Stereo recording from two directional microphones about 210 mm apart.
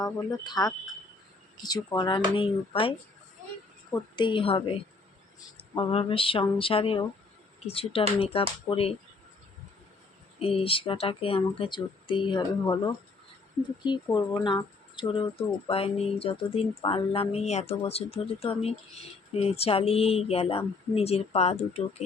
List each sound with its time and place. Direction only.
0.0 s speech: 20° left (ahead or behind)
3.9 s speech: 20° left (ahead or behind)
10.4 s speech: 25° left (ahead or behind)